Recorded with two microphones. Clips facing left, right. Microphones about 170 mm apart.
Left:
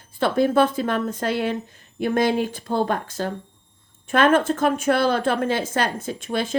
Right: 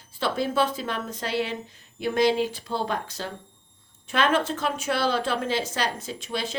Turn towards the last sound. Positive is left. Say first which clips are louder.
# left 6 dB
turn(degrees=50)  # may be behind; listen again after turning